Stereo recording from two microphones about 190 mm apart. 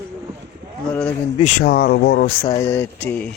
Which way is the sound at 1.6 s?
55° left (ahead or behind).